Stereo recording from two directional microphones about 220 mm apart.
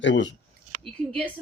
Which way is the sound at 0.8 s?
5° left (ahead or behind).